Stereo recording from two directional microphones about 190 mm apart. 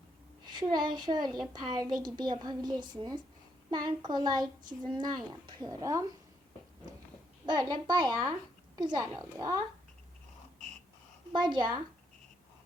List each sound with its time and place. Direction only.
0.4 s a woman's voice: 25° right (ahead or behind)
7.4 s a child's voice: 20° right (ahead or behind)
11.3 s a child's voice: 25° right (ahead or behind)